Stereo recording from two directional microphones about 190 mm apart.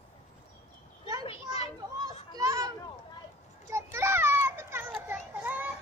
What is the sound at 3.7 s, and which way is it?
Children playing, 15° right (ahead or behind).